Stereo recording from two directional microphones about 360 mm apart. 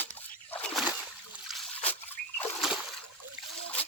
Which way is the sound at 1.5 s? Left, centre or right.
Centre.